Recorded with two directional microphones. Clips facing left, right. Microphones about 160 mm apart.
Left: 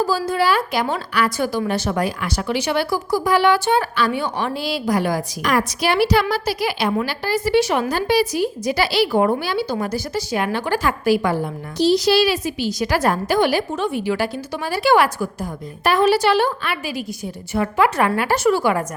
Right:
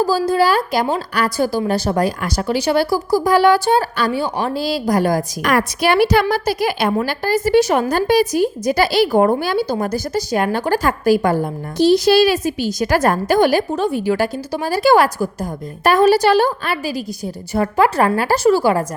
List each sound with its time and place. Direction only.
0.0 s a woman's voice: 40° right (ahead or behind)